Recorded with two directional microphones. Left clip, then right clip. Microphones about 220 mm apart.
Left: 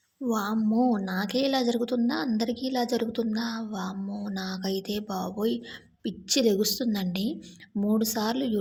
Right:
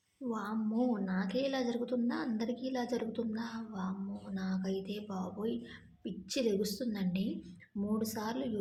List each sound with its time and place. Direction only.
0.3 s a woman's voice: 40° left (ahead or behind)